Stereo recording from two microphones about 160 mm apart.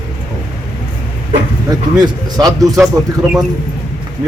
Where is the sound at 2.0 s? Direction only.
25° right (ahead or behind).